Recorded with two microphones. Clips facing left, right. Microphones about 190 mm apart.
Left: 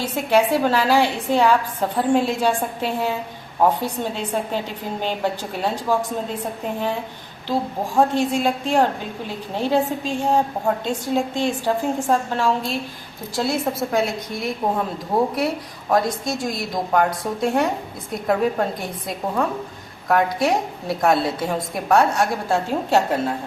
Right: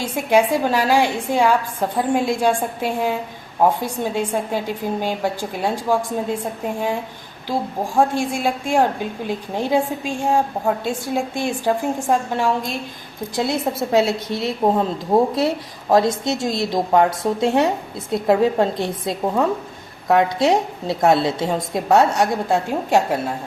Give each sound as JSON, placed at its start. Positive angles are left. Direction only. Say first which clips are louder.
{"t": 0.0, "sound": "a woman's voice", "louder": "right 1 dB", "side_deg": -15}
{"t": 7.9, "sound": "a woman's voice", "louder": "left 1 dB", "side_deg": -10}